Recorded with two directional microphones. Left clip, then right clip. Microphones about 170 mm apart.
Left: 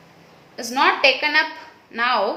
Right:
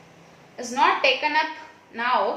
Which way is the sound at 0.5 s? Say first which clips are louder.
Left 2 dB; 50° left (ahead or behind).